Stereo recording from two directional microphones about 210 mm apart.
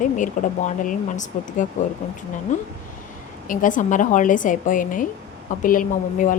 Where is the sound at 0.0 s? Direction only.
35° left (ahead or behind).